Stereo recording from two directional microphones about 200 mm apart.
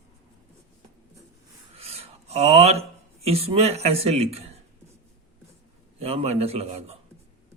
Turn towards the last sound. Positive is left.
turn(degrees=-30)  # may be behind; listen again after turning